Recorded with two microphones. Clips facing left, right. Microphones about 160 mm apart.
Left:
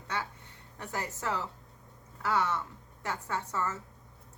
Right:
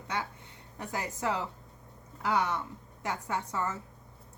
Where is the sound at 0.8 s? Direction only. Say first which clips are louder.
Right 2 dB; 15° right (ahead or behind).